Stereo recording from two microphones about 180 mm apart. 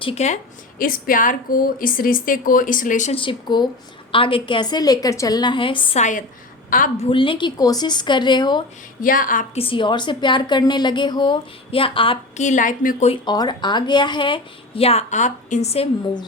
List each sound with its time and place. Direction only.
0.0 s a woman's voice: 35° left (ahead or behind)
0.8 s a woman's voice: 50° left (ahead or behind)
3.2 s a woman's voice: 25° left (ahead or behind)
6.0 s a woman's voice: 45° left (ahead or behind)
7.1 s a woman's voice: 30° left (ahead or behind)
9.0 s a woman's voice: 50° left (ahead or behind)
9.6 s a woman's voice: 30° left (ahead or behind)
12.5 s a woman's voice: 45° left (ahead or behind)
13.1 s a woman's voice: 25° left (ahead or behind)